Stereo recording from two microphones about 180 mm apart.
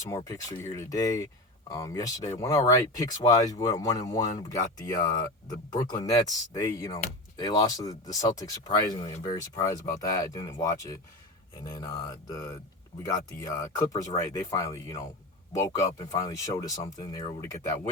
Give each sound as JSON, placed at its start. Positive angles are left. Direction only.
{"t": 0.0, "sound": "speech", "side_deg": 20}